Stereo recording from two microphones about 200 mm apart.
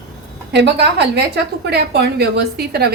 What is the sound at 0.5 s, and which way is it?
A woman's voice, 55° right (ahead or behind).